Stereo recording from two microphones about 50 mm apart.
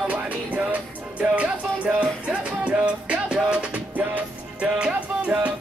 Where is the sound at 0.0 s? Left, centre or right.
Right.